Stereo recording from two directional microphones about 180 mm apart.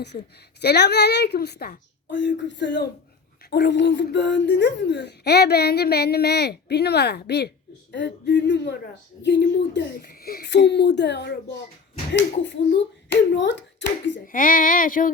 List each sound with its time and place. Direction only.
0.6 s a woman's voice: 65° left (ahead or behind)
14.3 s speech: 50° left (ahead or behind)